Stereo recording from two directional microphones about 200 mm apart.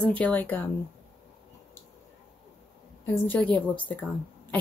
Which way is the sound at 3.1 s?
10° left (ahead or behind).